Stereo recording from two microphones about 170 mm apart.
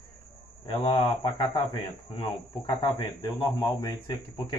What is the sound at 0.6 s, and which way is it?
Speech, 30° left (ahead or behind).